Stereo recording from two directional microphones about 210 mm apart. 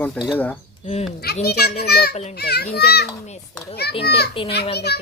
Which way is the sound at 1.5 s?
50° left (ahead or behind).